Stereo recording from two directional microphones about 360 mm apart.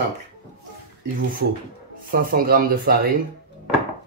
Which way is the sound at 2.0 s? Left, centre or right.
Right.